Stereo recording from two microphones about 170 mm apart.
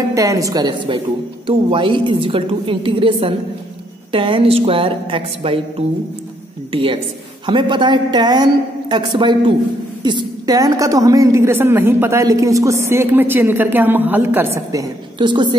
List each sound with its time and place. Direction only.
0.1 s a woman's voice: 20° right (ahead or behind)